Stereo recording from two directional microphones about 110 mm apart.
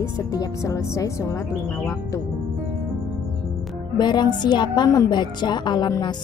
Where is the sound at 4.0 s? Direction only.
40° left (ahead or behind).